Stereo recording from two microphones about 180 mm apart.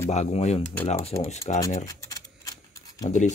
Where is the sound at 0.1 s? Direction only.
40° left (ahead or behind).